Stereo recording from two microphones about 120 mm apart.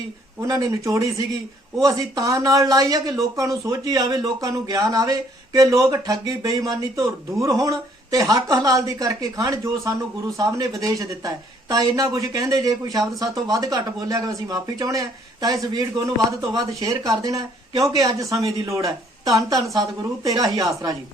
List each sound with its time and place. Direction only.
0.4 s speech: 30° right (ahead or behind)